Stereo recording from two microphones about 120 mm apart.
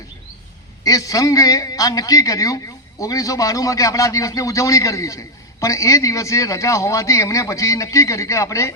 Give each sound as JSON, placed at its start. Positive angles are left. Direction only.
{"t": 0.9, "sound": "a man's voice", "side_deg": 30}